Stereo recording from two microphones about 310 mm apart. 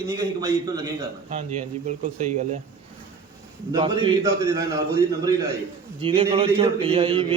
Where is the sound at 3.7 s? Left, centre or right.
Centre.